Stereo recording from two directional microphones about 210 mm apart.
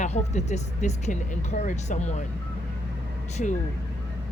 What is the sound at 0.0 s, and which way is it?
Speech, 35° left (ahead or behind).